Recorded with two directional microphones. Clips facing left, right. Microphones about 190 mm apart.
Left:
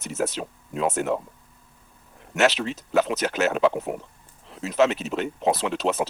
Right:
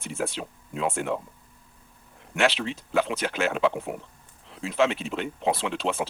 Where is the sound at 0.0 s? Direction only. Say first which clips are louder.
Left 3 dB; 40° left (ahead or behind).